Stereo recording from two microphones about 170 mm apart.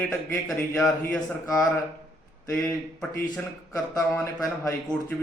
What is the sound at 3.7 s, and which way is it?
Speech, 20° left (ahead or behind).